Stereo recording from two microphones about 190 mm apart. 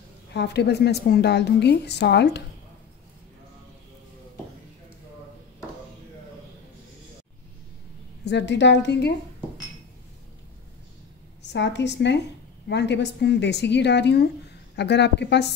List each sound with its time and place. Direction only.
0.3 s a woman's voice: 60° left (ahead or behind)
8.3 s a woman's voice: 65° left (ahead or behind)
11.4 s a woman's voice: 65° left (ahead or behind)